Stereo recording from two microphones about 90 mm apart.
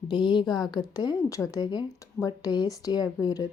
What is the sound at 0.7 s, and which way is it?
Speech, 45° left (ahead or behind).